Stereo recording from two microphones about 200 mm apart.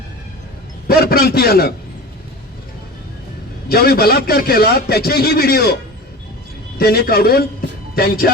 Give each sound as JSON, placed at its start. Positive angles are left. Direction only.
{"t": 0.9, "sound": "a man's voice", "side_deg": 50}
{"t": 3.7, "sound": "a man's voice", "side_deg": 50}
{"t": 6.7, "sound": "a man's voice", "side_deg": 50}